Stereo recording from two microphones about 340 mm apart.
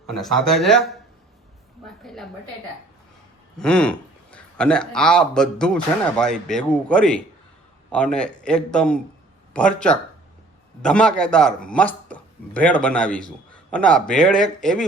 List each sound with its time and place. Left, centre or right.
0.1 s a man's voice: centre
3.6 s a man's voice: centre